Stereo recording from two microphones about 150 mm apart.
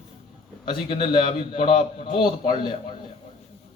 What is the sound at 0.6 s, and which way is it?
A man's voice, 35° left (ahead or behind).